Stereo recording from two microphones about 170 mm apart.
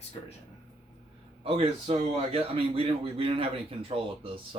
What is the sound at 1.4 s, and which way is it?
A man's voice, 35° right (ahead or behind).